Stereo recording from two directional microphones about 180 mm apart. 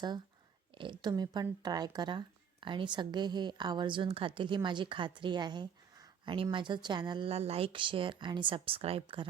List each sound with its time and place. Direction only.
0.8 s speech: 25° right (ahead or behind)